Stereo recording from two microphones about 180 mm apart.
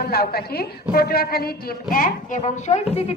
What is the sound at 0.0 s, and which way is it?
A woman's voice, 60° left (ahead or behind).